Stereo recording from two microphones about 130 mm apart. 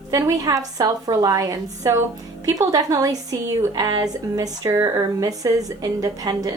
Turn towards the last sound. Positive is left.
turn(degrees=-30)  # may be behind; listen again after turning